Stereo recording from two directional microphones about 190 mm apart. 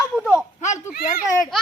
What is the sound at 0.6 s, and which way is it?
Speech, 40° left (ahead or behind).